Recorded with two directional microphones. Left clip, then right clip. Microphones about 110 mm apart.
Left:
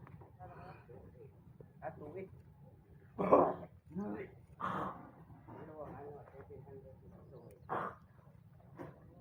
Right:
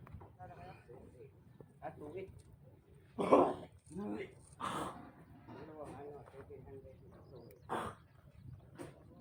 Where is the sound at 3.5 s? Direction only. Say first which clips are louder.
Even; 25° right (ahead or behind).